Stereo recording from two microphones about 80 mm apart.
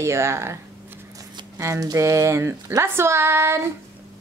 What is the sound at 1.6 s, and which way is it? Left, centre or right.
Speech, right.